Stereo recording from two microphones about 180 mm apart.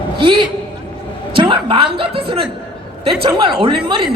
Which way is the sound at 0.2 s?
30° right (ahead or behind).